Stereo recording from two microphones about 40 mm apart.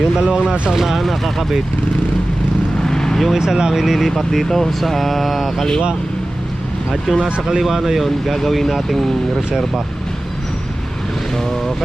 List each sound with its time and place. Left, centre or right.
0.0 s speech: right
0.7 s speech: centre
2.8 s vehicle: centre
3.3 s speech: centre
4.1 s speech: centre
6.9 s speech: centre